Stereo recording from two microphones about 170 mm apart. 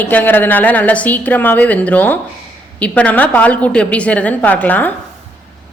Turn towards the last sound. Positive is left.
turn(degrees=10)  # may be behind; listen again after turning